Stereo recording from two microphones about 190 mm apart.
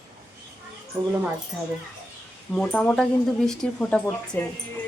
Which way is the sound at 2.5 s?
5° left (ahead or behind).